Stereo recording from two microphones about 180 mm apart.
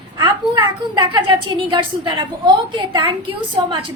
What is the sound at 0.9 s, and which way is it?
A woman's voice, 25° right (ahead or behind).